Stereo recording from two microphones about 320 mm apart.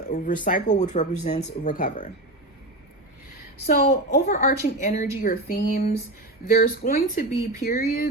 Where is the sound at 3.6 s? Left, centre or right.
Left.